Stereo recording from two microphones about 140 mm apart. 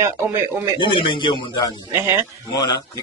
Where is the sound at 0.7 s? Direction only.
35° left (ahead or behind).